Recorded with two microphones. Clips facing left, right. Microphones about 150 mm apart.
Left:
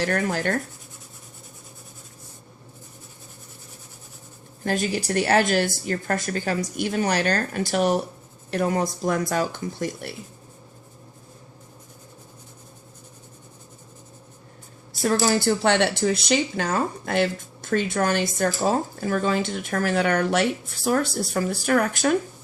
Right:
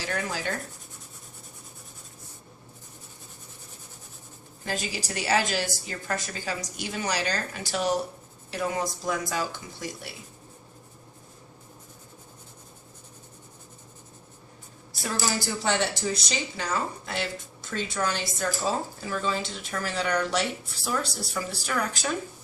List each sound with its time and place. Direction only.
0.0 s speech: 55° left (ahead or behind)
4.6 s speech: 55° left (ahead or behind)
15.0 s speech: 55° left (ahead or behind)